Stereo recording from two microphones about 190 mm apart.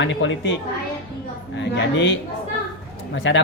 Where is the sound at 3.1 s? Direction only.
70° left (ahead or behind).